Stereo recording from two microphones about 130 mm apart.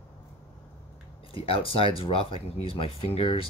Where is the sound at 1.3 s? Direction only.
45° left (ahead or behind).